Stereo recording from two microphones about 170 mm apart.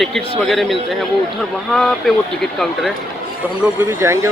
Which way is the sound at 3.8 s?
15° right (ahead or behind).